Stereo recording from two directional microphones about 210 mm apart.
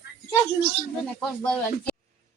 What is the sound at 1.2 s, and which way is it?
Speech, 5° left (ahead or behind).